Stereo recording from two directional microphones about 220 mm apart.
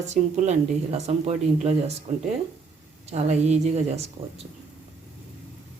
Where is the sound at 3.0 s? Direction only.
30° right (ahead or behind).